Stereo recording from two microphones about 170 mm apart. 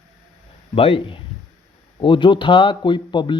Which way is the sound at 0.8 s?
35° left (ahead or behind).